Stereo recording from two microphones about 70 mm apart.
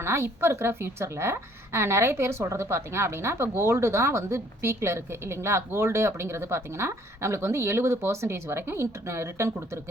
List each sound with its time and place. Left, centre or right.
0.0 s a woman's voice: right